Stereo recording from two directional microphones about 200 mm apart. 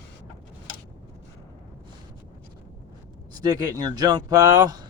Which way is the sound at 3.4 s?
20° right (ahead or behind).